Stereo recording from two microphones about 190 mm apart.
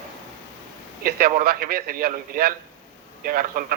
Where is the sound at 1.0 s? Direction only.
50° right (ahead or behind).